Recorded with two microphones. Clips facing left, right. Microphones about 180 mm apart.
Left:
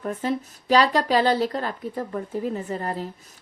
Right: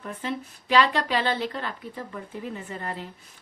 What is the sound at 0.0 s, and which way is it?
Speech, 40° left (ahead or behind).